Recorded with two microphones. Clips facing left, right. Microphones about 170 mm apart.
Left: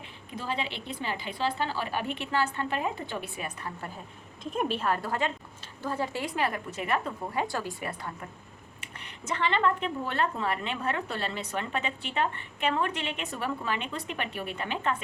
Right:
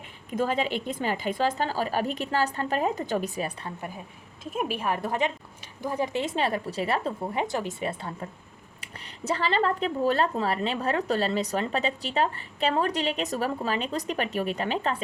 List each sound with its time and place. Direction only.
0.3 s speech: 45° right (ahead or behind)
4.5 s a woman's voice: 10° right (ahead or behind); by 15.0 s 35° right (ahead or behind)